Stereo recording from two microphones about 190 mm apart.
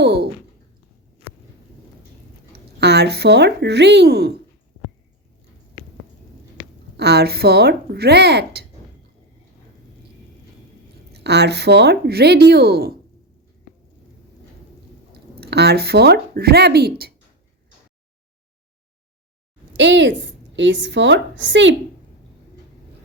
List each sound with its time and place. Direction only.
0.0 s speech: 55° right (ahead or behind)
2.5 s speech: 60° right (ahead or behind)
6.9 s speech: 60° right (ahead or behind)
11.1 s speech: 60° right (ahead or behind)
15.4 s speech: 60° right (ahead or behind)
19.7 s a woman's voice: 70° right (ahead or behind)